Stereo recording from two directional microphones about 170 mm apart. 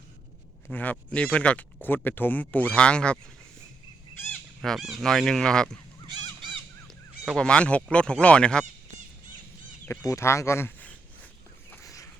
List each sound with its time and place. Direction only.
0.7 s speech: 10° left (ahead or behind)
4.3 s speech: centre (ahead or behind)
6.8 s speech: 5° left (ahead or behind)
9.8 s a sound: 15° left (ahead or behind)